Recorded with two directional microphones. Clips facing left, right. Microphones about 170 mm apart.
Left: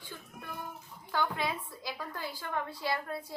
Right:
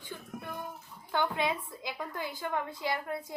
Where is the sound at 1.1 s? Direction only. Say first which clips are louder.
Right 2 dB; 20° right (ahead or behind).